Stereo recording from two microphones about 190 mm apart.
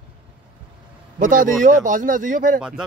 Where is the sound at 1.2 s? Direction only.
45° right (ahead or behind).